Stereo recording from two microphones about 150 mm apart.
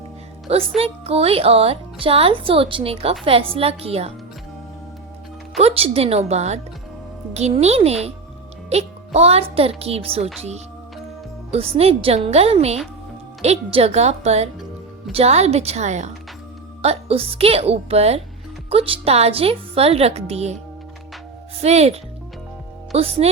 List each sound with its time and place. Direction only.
0.4 s speech: 40° right (ahead or behind)
5.5 s a woman's voice: 40° right (ahead or behind)
11.5 s a woman's voice: 40° right (ahead or behind)
21.6 s a woman's voice: 45° right (ahead or behind)